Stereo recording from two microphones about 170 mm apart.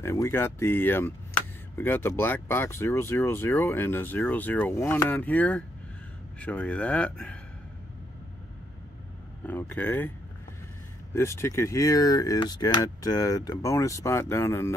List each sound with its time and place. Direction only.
0.0 s speech: 15° left (ahead or behind)
9.5 s speech: 10° left (ahead or behind)
11.1 s speech: 15° left (ahead or behind)